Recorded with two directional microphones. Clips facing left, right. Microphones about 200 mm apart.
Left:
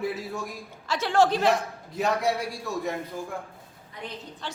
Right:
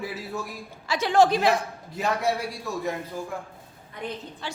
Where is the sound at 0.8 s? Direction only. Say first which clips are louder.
Right 2 dB; 15° right (ahead or behind).